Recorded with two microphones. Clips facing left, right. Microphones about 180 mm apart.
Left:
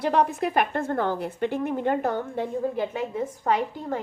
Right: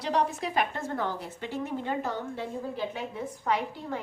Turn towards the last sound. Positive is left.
turn(degrees=45)  # may be behind; listen again after turning